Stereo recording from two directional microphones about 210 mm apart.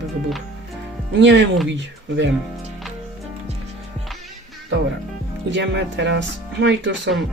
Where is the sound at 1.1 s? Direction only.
60° right (ahead or behind).